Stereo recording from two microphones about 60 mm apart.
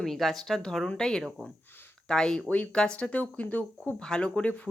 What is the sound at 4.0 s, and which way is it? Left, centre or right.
Speech, centre.